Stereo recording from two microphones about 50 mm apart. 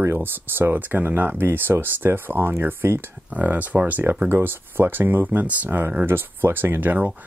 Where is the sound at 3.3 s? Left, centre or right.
Right.